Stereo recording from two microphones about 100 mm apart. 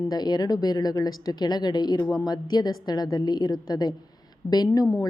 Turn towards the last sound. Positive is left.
turn(degrees=35)  # may be behind; listen again after turning